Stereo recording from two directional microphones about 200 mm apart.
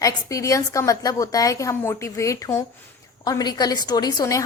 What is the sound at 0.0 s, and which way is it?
A woman's voice, 15° left (ahead or behind).